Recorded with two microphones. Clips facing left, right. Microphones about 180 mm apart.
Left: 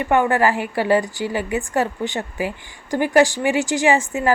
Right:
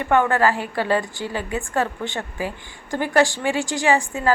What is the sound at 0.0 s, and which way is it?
A woman's voice, 15° left (ahead or behind).